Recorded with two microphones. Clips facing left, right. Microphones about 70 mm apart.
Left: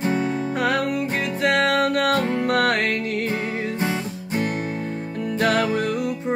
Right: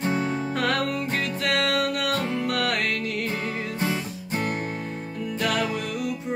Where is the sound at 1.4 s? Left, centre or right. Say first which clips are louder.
Left 6 dB; left.